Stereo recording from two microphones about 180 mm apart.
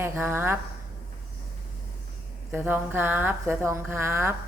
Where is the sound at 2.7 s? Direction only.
10° right (ahead or behind).